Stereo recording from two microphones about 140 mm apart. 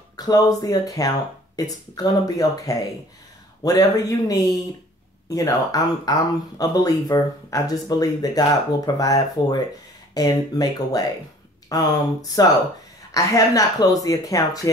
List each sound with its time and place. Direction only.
0.1 s speech: 30° left (ahead or behind)